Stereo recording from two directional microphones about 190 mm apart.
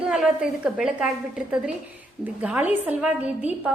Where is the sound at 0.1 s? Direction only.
5° right (ahead or behind).